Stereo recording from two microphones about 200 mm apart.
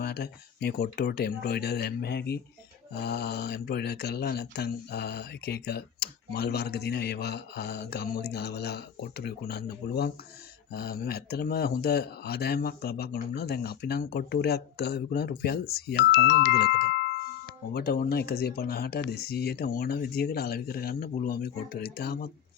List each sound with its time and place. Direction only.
0.0 s speech: 50° left (ahead or behind)